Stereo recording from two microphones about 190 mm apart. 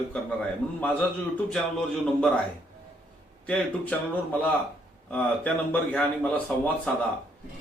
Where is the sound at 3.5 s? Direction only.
10° left (ahead or behind).